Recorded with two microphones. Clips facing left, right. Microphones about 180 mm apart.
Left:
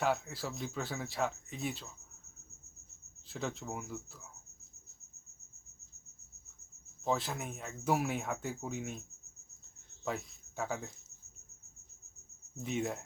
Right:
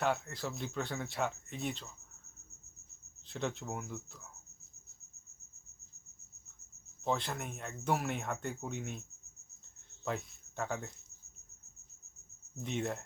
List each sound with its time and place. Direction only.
0.0 s speech: 5° left (ahead or behind)
3.2 s speech: centre (ahead or behind)
7.0 s speech: centre (ahead or behind)
12.6 s speech: 5° left (ahead or behind)